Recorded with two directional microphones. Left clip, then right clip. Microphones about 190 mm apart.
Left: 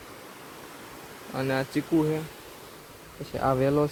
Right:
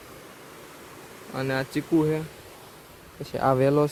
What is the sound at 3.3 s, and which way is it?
Speech, 25° right (ahead or behind).